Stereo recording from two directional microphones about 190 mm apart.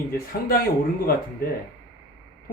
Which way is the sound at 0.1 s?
50° left (ahead or behind).